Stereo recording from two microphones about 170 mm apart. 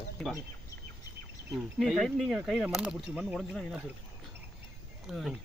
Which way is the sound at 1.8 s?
Centre (ahead or behind).